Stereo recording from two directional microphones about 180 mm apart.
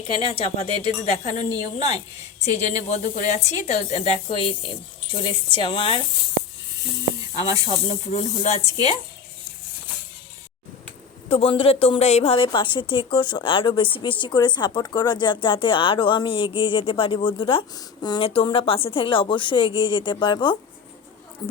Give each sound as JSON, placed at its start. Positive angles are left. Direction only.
{"t": 0.1, "sound": "a woman's voice", "side_deg": 30}
{"t": 7.4, "sound": "a woman's voice", "side_deg": 35}
{"t": 11.3, "sound": "a woman's voice", "side_deg": 30}